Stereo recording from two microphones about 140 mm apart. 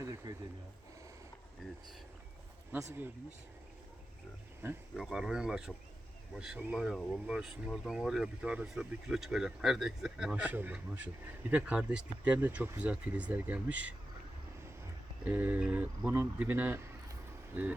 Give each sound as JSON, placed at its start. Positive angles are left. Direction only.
{"t": 0.0, "sound": "a sound", "side_deg": -25}
{"t": 2.7, "sound": "speech", "side_deg": -20}
{"t": 4.6, "sound": "speech", "side_deg": -15}
{"t": 4.9, "sound": "speech", "side_deg": 0}
{"t": 15.2, "sound": "speech", "side_deg": -15}